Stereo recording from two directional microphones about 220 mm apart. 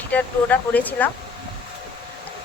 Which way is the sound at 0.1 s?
5° left (ahead or behind).